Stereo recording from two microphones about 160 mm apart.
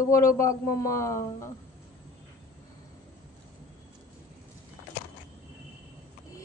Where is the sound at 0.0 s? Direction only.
20° left (ahead or behind).